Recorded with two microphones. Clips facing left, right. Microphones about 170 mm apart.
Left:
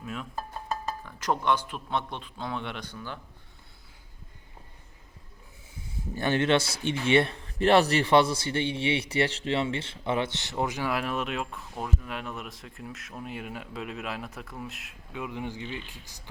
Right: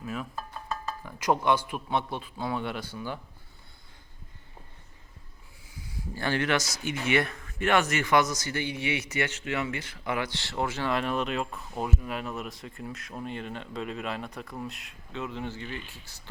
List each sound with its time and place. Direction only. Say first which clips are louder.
0.0 s a man's voice: right 1 dB; centre (ahead or behind)
6.1 s a man's voice: left 3 dB; 20° left (ahead or behind); by 11.6 s centre (ahead or behind)
11.7 s speech: right 3 dB; 10° right (ahead or behind); by 16.3 s 15° left (ahead or behind)